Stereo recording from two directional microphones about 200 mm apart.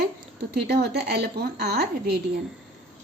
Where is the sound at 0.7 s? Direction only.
55° right (ahead or behind).